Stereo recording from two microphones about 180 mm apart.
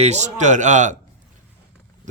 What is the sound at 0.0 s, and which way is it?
Speech, 40° right (ahead or behind).